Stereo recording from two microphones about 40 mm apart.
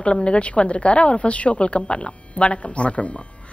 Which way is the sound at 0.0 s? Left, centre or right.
Left.